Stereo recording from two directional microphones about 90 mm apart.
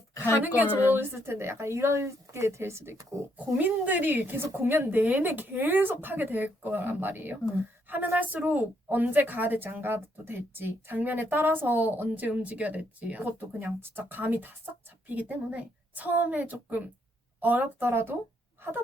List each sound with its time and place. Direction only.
0.4 s a woman's voice: 20° right (ahead or behind)
3.3 s a woman's voice: 20° right (ahead or behind)